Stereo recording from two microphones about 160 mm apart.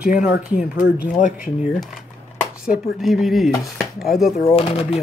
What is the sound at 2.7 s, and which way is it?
Dishes, centre (ahead or behind).